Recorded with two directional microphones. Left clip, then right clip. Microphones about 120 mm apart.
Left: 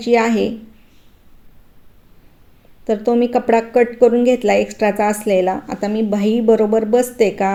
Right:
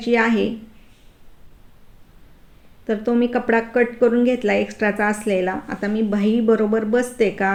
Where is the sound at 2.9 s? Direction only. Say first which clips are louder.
Left 5 dB; 25° left (ahead or behind).